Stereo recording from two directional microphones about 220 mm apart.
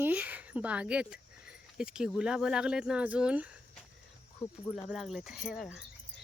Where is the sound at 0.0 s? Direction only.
5° right (ahead or behind).